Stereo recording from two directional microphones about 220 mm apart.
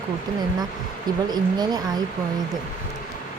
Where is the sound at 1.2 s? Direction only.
20° right (ahead or behind).